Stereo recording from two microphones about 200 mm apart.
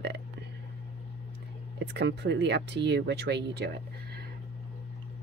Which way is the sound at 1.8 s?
60° right (ahead or behind).